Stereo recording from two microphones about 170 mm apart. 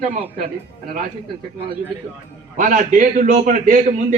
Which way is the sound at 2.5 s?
50° right (ahead or behind).